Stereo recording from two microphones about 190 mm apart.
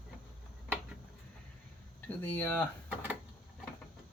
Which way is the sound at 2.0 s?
10° left (ahead or behind).